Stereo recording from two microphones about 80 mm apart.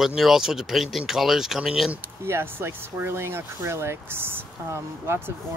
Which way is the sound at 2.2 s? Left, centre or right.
Right.